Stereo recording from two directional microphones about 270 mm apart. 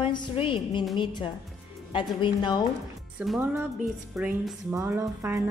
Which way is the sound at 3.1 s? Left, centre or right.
Centre.